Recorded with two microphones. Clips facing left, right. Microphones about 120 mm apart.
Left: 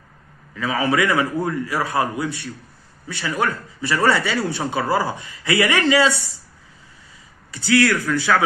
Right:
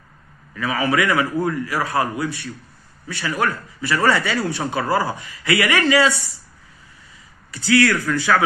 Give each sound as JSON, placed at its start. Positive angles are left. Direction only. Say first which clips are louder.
{"t": 0.6, "sound": "a man's voice", "louder": "even", "side_deg": 30}
{"t": 7.5, "sound": "a man's voice", "louder": "right 1 dB", "side_deg": 25}